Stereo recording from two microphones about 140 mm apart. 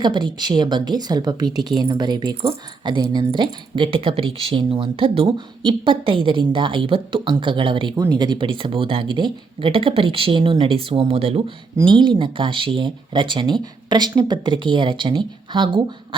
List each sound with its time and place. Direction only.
0.0 s a woman's voice: 35° right (ahead or behind)